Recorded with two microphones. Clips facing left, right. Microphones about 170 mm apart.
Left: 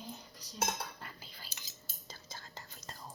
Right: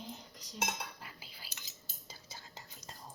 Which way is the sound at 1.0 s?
5° right (ahead or behind).